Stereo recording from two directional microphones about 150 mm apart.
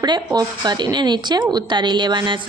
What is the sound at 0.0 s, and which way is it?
Speech, 25° right (ahead or behind).